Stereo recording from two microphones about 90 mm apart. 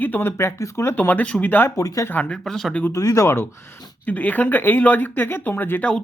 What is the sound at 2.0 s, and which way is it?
Speech, 20° left (ahead or behind).